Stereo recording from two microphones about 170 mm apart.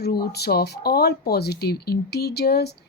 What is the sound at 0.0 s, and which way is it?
A woman's voice, 65° left (ahead or behind).